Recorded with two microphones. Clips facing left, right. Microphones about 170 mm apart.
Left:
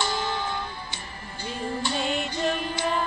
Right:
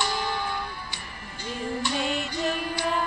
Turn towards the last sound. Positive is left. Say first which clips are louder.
# left 1 dB
turn(degrees=-5)  # may be behind; listen again after turning